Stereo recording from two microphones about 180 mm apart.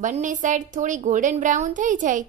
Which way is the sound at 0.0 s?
45° right (ahead or behind).